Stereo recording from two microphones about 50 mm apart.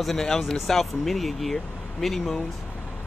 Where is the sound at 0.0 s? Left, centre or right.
Centre.